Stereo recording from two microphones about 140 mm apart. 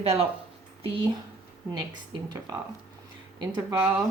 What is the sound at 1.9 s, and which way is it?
Speech, 30° right (ahead or behind).